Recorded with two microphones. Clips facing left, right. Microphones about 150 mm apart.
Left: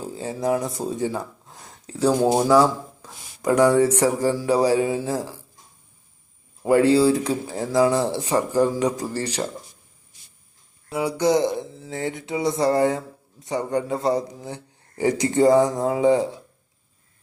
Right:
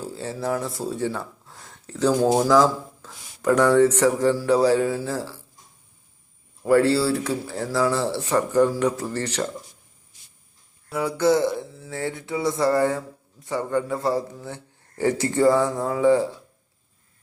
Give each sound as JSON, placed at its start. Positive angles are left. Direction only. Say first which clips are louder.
{"t": 0.0, "sound": "speech", "louder": "left 3 dB", "side_deg": 15}
{"t": 6.6, "sound": "speech", "louder": "left 2 dB", "side_deg": 15}
{"t": 10.8, "sound": "speech", "louder": "even", "side_deg": 15}